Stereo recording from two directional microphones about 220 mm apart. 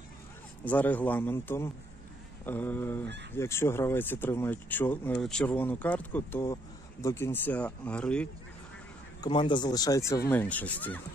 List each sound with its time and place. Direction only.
0.7 s speech: 5° left (ahead or behind)
9.2 s speech: 20° left (ahead or behind)